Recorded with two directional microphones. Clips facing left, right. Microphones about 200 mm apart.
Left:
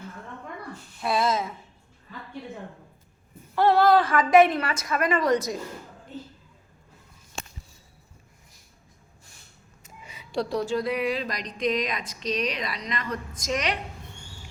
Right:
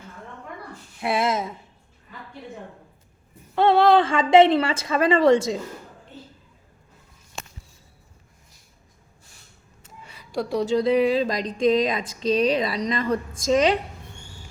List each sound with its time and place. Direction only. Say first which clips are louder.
1.0 s speech: right 1 dB; 25° right (ahead or behind)
3.5 s speech: right 2 dB; 25° right (ahead or behind)
10.6 s speech: right 10 dB; 20° right (ahead or behind)